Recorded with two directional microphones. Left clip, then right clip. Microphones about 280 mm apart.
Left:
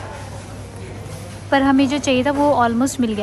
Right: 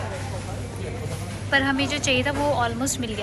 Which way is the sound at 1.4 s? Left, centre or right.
Left.